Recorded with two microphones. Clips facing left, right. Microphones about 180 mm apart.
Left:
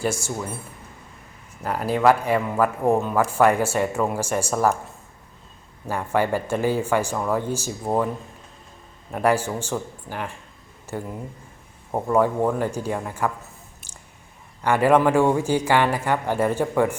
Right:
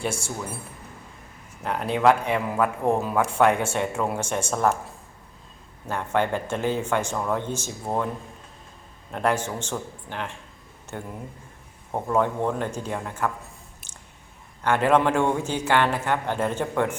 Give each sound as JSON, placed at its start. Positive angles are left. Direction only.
{"t": 1.6, "sound": "speech", "side_deg": 5}
{"t": 5.9, "sound": "speech", "side_deg": 5}
{"t": 9.1, "sound": "speech", "side_deg": 10}
{"t": 14.6, "sound": "speech", "side_deg": 10}